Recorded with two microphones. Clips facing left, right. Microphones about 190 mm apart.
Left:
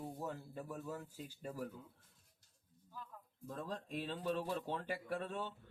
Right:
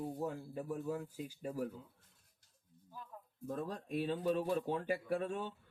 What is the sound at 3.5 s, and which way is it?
Speech, 10° right (ahead or behind).